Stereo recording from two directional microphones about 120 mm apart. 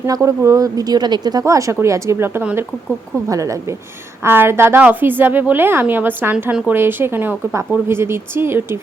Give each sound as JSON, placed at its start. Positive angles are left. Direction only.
{"t": 0.1, "sound": "speech", "side_deg": -25}
{"t": 3.2, "sound": "a woman's voice", "side_deg": -25}